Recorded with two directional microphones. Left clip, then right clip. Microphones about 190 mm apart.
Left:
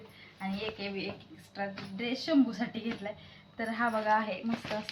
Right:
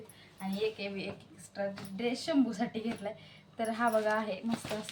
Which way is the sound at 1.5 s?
30° right (ahead or behind).